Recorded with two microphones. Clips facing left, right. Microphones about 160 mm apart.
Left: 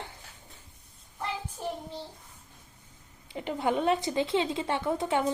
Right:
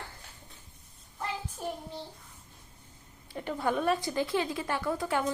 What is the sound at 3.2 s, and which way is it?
A woman's voice, 20° left (ahead or behind).